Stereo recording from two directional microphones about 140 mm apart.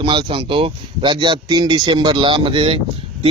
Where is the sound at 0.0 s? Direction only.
35° right (ahead or behind).